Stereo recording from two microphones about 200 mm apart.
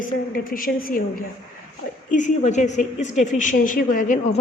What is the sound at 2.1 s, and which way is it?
A woman's voice, 35° left (ahead or behind).